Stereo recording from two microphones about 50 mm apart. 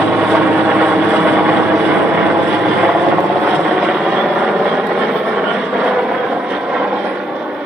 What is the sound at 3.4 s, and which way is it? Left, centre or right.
Vehicle, centre.